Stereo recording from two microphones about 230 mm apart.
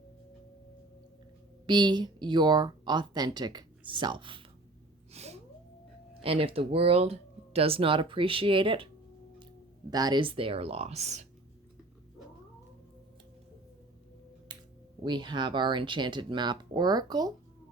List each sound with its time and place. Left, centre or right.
1.6 s speech: centre
5.1 s a sound: right
6.2 s speech: right
9.9 s speech: centre
14.5 s a sound: centre
15.0 s speech: centre